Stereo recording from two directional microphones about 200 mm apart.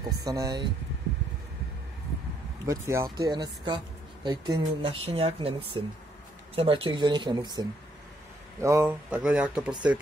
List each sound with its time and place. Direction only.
0.2 s speech: 20° right (ahead or behind)
2.6 s speech: 15° right (ahead or behind)